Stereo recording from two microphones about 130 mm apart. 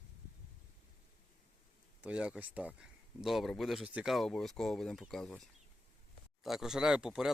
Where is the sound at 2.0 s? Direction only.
5° right (ahead or behind).